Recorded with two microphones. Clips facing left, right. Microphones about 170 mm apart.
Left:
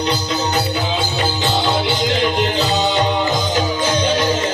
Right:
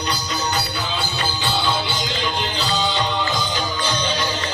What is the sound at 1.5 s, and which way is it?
Music, 45° left (ahead or behind).